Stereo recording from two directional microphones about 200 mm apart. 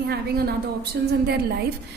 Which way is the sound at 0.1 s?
50° right (ahead or behind).